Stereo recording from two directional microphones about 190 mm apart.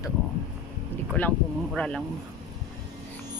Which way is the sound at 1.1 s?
5° left (ahead or behind).